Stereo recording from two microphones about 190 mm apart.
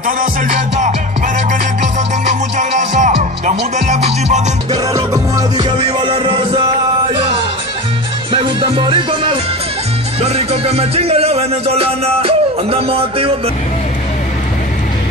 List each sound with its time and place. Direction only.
2.5 s music: 40° right (ahead or behind)
4.9 s music: 15° right (ahead or behind)
8.3 s music: 25° right (ahead or behind)
10.2 s speech: 35° right (ahead or behind)